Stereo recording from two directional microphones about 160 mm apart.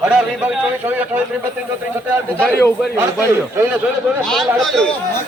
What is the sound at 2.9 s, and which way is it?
Speech, 15° right (ahead or behind).